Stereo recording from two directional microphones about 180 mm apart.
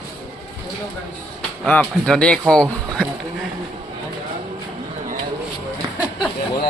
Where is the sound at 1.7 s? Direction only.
5° left (ahead or behind).